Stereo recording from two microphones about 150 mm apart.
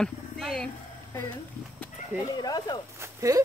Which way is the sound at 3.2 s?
20° right (ahead or behind).